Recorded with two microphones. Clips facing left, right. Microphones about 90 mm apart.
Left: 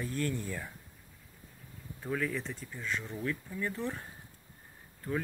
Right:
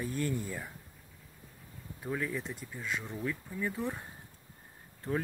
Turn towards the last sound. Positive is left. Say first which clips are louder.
# right 1 dB
turn(degrees=-25)  # may be behind; listen again after turning